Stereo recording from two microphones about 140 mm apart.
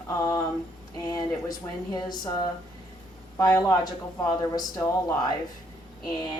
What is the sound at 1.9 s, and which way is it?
Speech, 30° left (ahead or behind).